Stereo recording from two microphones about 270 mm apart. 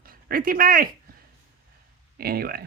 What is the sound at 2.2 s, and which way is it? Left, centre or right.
Speech, right.